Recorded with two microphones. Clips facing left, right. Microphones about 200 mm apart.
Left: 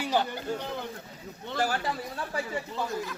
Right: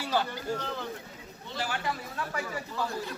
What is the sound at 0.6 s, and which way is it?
Speech, 15° left (ahead or behind).